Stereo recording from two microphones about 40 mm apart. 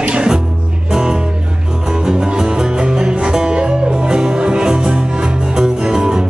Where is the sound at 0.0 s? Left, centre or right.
Right.